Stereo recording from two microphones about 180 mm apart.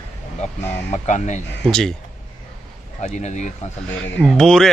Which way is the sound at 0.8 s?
40° left (ahead or behind).